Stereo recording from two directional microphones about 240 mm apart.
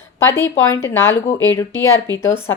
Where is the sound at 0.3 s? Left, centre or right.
Left.